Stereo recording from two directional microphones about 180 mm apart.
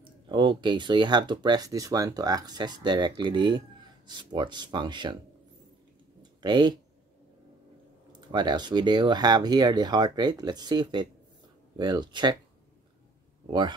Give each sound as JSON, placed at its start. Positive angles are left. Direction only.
{"t": 0.0, "sound": "speech", "side_deg": -25}
{"t": 6.4, "sound": "speech", "side_deg": -25}
{"t": 8.1, "sound": "speech", "side_deg": -25}
{"t": 13.5, "sound": "speech", "side_deg": -25}